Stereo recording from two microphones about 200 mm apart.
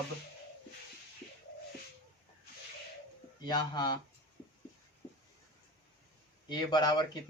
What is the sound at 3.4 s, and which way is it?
Speech, 20° left (ahead or behind).